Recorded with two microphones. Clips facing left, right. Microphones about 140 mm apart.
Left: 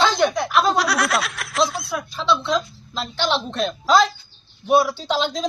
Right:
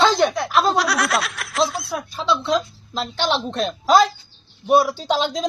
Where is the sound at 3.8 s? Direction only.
45° right (ahead or behind).